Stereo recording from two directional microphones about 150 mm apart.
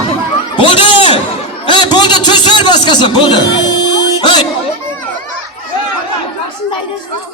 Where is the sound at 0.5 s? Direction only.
35° left (ahead or behind).